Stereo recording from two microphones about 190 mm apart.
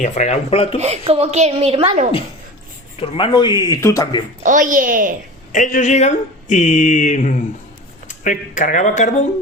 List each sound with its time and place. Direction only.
0.0 s speech: 35° left (ahead or behind)
0.8 s a woman's voice: 30° right (ahead or behind)
3.0 s speech: 25° left (ahead or behind)
4.4 s a woman's voice: 45° right (ahead or behind)
5.5 s speech: 45° left (ahead or behind)